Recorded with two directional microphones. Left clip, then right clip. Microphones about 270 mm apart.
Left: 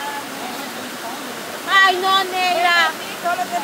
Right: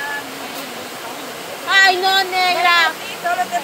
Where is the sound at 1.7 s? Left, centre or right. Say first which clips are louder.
Right 1 dB; centre.